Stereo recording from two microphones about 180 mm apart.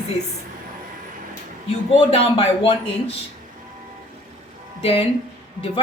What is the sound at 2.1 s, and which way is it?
Speech, 30° left (ahead or behind).